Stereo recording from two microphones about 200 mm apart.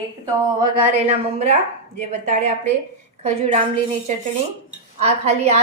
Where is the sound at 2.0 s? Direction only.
35° right (ahead or behind).